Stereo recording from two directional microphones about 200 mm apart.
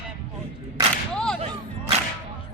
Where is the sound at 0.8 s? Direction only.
20° right (ahead or behind).